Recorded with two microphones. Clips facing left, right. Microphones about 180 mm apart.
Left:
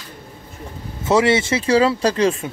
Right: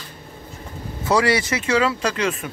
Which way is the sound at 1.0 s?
25° left (ahead or behind).